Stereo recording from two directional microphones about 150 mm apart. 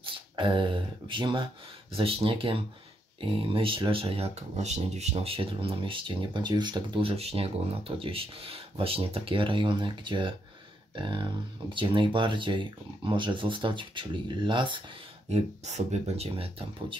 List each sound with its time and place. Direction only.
0.0 s speech: 35° right (ahead or behind)
15.3 s speech: 50° right (ahead or behind)